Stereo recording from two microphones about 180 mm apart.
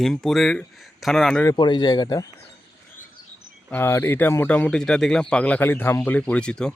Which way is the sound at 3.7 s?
15° left (ahead or behind).